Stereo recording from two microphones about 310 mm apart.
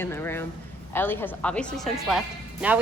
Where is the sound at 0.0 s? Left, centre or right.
Centre.